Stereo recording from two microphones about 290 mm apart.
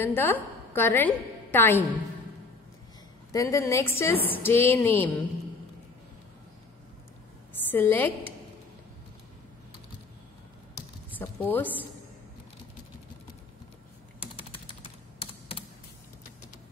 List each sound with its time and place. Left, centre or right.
0.0 s a woman's voice: centre
3.3 s a woman's voice: centre
7.7 s a woman's voice: centre
11.1 s speech: centre
14.2 s typing: centre